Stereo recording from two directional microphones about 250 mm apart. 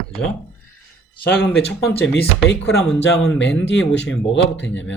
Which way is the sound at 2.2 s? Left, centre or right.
Left.